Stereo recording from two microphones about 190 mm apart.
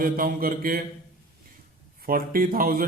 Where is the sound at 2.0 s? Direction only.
50° right (ahead or behind).